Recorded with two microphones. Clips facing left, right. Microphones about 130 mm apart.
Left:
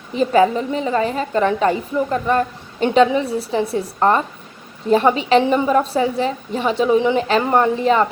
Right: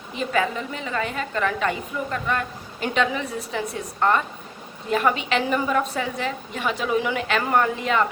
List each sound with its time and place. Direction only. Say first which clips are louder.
0.1 s a woman's voice: left 9 dB; 35° left (ahead or behind)